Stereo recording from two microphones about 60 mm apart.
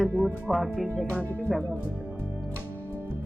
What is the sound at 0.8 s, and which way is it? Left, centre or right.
Speech, left.